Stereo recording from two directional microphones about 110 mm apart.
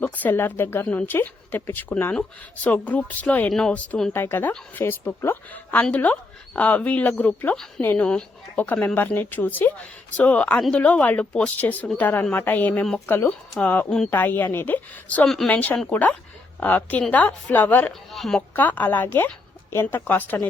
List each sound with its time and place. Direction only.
0.0 s speech: 15° left (ahead or behind)
4.1 s a woman's voice: 20° left (ahead or behind)
15.2 s speech: 5° left (ahead or behind)
15.4 s speech: 15° left (ahead or behind)
18.1 s speech: centre (ahead or behind)
18.3 s a woman's voice: 15° left (ahead or behind)